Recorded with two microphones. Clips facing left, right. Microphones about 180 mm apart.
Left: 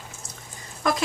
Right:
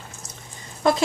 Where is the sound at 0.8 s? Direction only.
30° right (ahead or behind).